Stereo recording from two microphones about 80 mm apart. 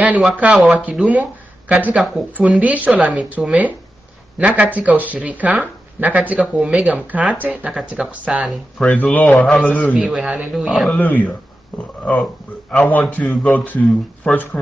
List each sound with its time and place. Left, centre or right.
0.0 s speech: centre
8.8 s speech: centre
10.0 s speech: centre
10.9 s speech: left
12.7 s speech: left